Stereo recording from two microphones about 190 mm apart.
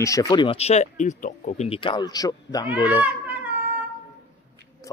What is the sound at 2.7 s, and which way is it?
Speech, 10° right (ahead or behind).